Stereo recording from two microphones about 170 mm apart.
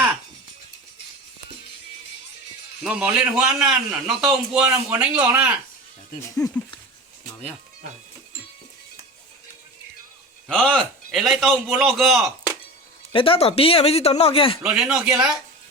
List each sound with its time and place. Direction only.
2.8 s a man's voice: 5° right (ahead or behind)
10.5 s a man's voice: 5° left (ahead or behind)
13.1 s speech: 30° left (ahead or behind)
14.8 s a man's voice: 5° right (ahead or behind)